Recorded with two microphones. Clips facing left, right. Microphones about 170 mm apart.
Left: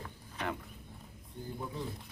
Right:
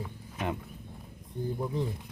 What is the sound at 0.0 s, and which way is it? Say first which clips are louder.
Roaring cats: right 4 dB; 10° right (ahead or behind).